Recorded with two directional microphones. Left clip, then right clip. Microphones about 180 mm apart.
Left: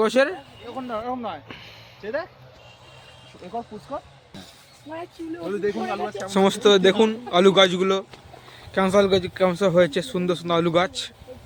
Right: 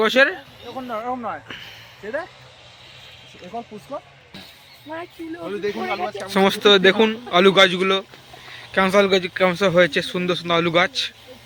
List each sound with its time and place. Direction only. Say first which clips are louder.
0.0 s speech: right 3 dB; 5° left (ahead or behind)
0.8 s speech: right 2 dB; 40° right (ahead or behind)
1.5 s speech: right 5 dB; centre (ahead or behind)
3.9 s speech: right 1 dB; 40° right (ahead or behind)
5.5 s speech: right 1 dB; 50° left (ahead or behind)
6.3 s speech: right 2 dB; centre (ahead or behind)